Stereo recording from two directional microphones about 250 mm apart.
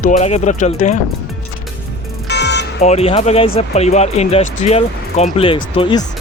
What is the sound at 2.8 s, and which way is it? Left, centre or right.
Speech, left.